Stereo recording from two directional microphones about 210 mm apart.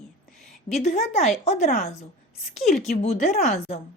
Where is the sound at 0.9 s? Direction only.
30° left (ahead or behind).